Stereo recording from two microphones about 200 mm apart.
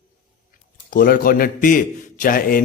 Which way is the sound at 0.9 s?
45° left (ahead or behind).